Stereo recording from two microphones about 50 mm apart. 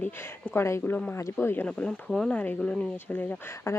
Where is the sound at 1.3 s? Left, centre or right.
Left.